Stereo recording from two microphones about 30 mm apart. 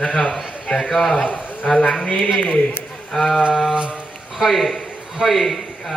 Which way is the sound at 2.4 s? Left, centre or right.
Left.